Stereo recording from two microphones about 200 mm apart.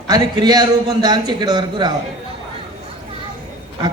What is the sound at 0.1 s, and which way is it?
A man's voice, 20° right (ahead or behind).